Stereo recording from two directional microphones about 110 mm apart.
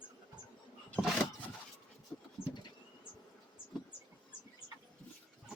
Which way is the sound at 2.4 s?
50° left (ahead or behind).